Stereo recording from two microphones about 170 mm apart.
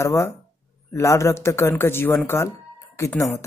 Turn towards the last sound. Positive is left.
turn(degrees=15)  # may be behind; listen again after turning